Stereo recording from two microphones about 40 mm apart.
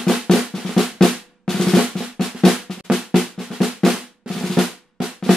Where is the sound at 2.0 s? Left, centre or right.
Centre.